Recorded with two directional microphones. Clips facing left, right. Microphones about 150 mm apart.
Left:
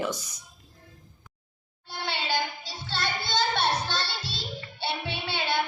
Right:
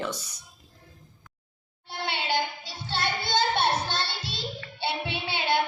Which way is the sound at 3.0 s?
55° right (ahead or behind).